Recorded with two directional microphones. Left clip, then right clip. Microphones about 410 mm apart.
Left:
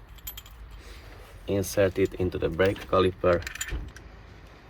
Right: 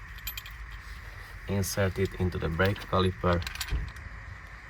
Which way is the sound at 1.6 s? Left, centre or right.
Right.